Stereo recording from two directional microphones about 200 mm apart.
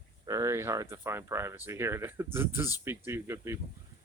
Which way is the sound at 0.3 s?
15° right (ahead or behind).